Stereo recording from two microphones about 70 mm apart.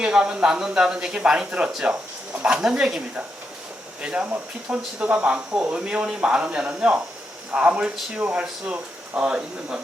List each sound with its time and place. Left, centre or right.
0.0 s speech: centre